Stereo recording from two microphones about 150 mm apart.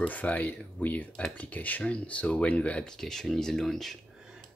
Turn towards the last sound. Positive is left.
turn(degrees=0)  # may be behind; listen again after turning